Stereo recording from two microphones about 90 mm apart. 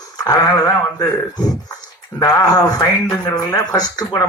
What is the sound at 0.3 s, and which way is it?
Speech, 45° left (ahead or behind).